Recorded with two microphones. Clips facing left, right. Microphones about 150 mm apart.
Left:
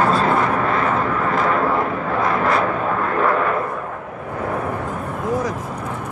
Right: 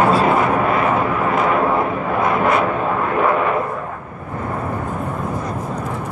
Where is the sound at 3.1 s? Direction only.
10° right (ahead or behind).